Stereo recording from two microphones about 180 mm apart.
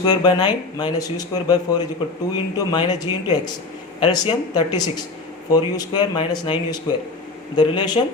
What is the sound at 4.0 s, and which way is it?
Speech, 25° left (ahead or behind).